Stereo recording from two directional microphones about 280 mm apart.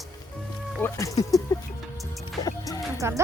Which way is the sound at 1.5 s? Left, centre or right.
Centre.